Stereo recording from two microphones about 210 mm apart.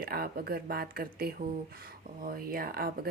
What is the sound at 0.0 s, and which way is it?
A woman's voice, 45° right (ahead or behind).